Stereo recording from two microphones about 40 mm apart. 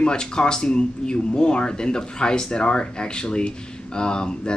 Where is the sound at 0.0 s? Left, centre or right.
Left.